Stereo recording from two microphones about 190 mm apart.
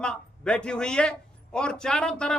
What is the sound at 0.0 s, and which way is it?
A man's voice, 5° left (ahead or behind).